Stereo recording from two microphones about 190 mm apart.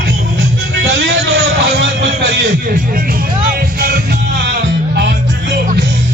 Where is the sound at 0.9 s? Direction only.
55° right (ahead or behind).